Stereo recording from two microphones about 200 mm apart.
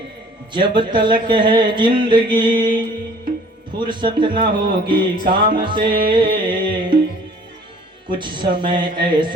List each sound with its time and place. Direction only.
0.5 s speech: 25° right (ahead or behind)
8.0 s speech: 25° right (ahead or behind)